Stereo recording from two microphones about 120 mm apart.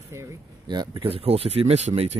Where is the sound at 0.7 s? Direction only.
35° right (ahead or behind).